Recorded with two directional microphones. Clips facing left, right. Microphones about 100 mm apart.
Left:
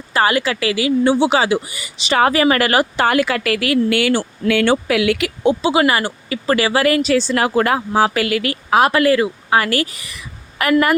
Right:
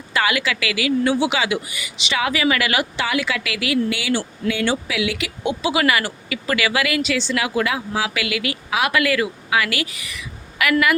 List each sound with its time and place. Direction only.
0.1 s speech: 35° left (ahead or behind); by 5.3 s 55° left (ahead or behind)
5.4 s speech: 30° left (ahead or behind)